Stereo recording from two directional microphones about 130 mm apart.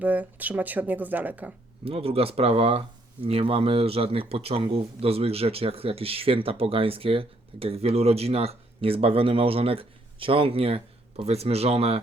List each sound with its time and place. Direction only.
0.0 s speech: 10° right (ahead or behind)
1.8 s speech: 45° right (ahead or behind)